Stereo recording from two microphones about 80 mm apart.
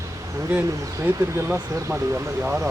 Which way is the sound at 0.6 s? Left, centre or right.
Right.